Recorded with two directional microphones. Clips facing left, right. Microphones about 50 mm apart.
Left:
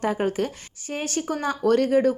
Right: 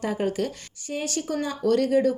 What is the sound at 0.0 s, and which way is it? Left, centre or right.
Speech, left.